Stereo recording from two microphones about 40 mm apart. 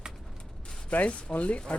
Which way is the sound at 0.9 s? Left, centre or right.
Left.